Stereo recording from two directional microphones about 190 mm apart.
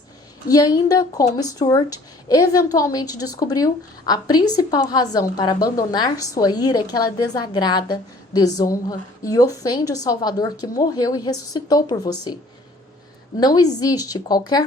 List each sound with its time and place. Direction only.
0.4 s a woman's voice: 20° left (ahead or behind)
13.4 s a woman's voice: 20° left (ahead or behind)